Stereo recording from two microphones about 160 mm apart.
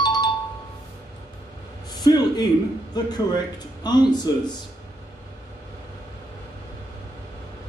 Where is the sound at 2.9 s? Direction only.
25° left (ahead or behind).